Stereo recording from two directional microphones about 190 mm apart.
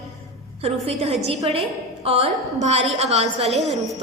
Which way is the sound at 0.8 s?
30° right (ahead or behind).